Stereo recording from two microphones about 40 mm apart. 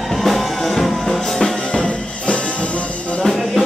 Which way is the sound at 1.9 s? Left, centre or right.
Left.